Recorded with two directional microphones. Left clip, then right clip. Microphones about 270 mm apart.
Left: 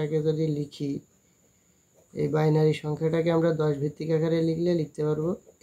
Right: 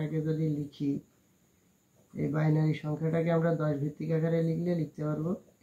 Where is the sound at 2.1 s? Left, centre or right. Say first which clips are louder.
Left 7 dB; left.